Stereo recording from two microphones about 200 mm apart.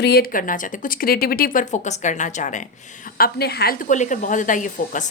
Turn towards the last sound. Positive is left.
turn(degrees=40)  # may be behind; listen again after turning